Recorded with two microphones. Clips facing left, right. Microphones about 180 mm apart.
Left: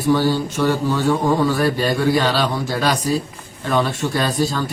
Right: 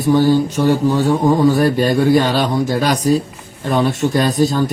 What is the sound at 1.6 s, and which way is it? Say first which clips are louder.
A man's voice: right 4 dB; 50° right (ahead or behind).